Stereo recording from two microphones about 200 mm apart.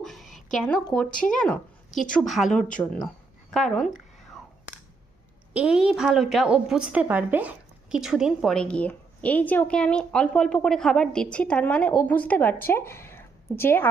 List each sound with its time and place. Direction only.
0.0 s a sound: centre (ahead or behind)
0.5 s a woman's voice: 5° left (ahead or behind)
1.9 s a woman's voice: 40° left (ahead or behind)
2.1 s a woman's voice: centre (ahead or behind)
5.5 s a woman's voice: 5° right (ahead or behind); by 13.8 s 10° left (ahead or behind)